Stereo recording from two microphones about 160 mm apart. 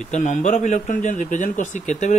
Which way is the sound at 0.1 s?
50° left (ahead or behind).